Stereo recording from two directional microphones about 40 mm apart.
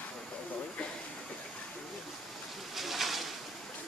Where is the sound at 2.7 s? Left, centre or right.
Centre.